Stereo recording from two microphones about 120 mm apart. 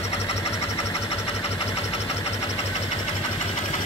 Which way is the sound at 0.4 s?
25° left (ahead or behind).